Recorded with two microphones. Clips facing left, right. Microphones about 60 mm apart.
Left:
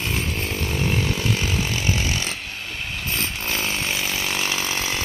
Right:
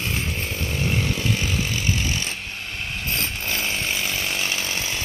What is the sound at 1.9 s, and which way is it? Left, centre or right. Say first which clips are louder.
Chainsaw: left 1 dB; left.